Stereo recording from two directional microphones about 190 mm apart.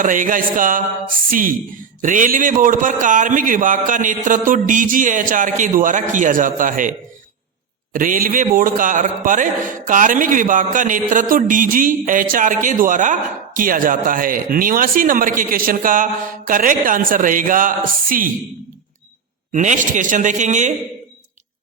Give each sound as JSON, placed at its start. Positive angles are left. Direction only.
{"t": 0.0, "sound": "a man's voice", "side_deg": -45}
{"t": 7.9, "sound": "a man's voice", "side_deg": -45}
{"t": 19.5, "sound": "speech", "side_deg": -40}